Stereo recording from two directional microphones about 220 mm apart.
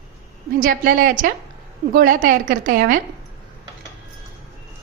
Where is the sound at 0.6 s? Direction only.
40° right (ahead or behind).